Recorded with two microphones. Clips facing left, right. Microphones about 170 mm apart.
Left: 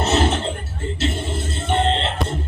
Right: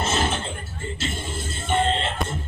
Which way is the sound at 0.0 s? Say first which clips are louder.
Left 5 dB; 70° left (ahead or behind).